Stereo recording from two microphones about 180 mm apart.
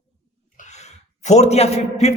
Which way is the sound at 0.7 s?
40° left (ahead or behind).